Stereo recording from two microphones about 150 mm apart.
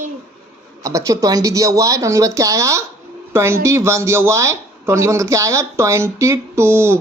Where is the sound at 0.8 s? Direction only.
20° right (ahead or behind).